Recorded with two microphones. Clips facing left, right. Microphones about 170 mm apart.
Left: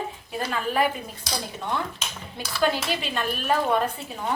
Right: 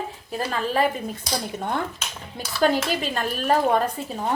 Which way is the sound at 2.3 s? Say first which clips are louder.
Right 4 dB; 40° right (ahead or behind).